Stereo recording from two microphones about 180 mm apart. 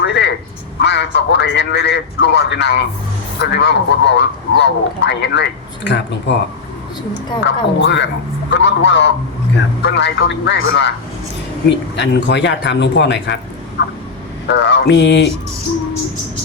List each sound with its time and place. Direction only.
0.0 s a sound: 75° left (ahead or behind)
0.8 s a man's voice: 70° left (ahead or behind)
7.4 s a man's voice: 85° left
11.9 s a man's voice: 75° left (ahead or behind)
14.4 s a man's voice: 70° left (ahead or behind)